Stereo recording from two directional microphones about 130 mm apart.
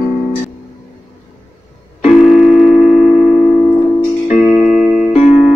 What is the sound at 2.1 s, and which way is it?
Music, centre (ahead or behind).